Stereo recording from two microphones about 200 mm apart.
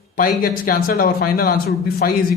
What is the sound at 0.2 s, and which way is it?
Speech, 45° left (ahead or behind).